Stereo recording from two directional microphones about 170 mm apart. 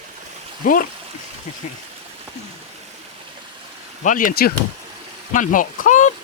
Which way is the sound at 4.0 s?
50° left (ahead or behind).